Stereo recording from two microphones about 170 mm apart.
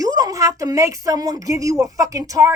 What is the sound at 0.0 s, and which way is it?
A woman's voice, 20° right (ahead or behind).